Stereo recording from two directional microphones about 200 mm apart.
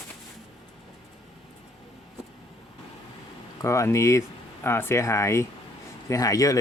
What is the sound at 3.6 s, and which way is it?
Speech, 15° left (ahead or behind).